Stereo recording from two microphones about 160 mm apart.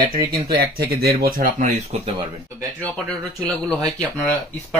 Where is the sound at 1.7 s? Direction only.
40° right (ahead or behind).